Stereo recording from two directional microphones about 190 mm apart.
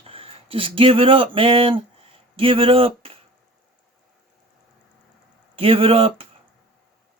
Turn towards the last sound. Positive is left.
turn(degrees=-30)  # may be behind; listen again after turning